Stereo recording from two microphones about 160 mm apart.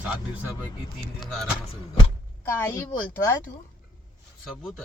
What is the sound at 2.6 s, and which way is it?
Speech, 15° left (ahead or behind).